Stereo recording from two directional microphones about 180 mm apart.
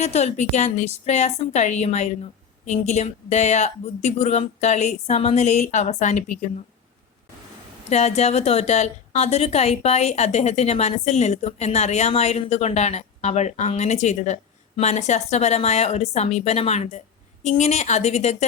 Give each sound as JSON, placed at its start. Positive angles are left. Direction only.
{"t": 0.0, "sound": "a woman's voice", "side_deg": 40}
{"t": 7.9, "sound": "a woman's voice", "side_deg": 40}